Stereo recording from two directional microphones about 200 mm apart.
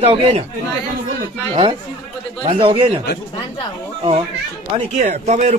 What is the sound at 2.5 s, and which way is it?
Speech, 25° right (ahead or behind).